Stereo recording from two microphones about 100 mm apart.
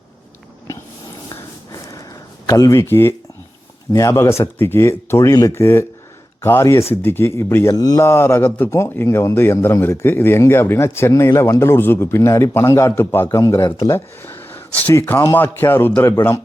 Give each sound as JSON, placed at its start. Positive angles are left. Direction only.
{"t": 1.7, "sound": "a sound", "side_deg": 35}
{"t": 2.5, "sound": "a man's voice", "side_deg": 35}
{"t": 7.7, "sound": "speech", "side_deg": 40}
{"t": 8.0, "sound": "a man's voice", "side_deg": 25}
{"t": 14.2, "sound": "a man's voice", "side_deg": 20}